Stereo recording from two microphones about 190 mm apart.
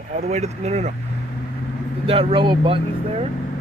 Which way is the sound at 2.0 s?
30° right (ahead or behind).